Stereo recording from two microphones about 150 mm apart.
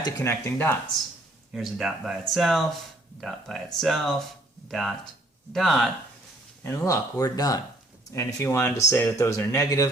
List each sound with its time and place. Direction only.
0.0 s speech: 20° left (ahead or behind)
1.5 s speech: 5° right (ahead or behind)
6.6 s speech: 20° left (ahead or behind)